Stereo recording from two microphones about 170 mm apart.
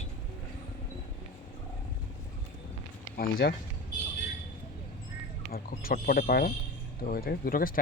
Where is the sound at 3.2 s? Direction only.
65° left (ahead or behind).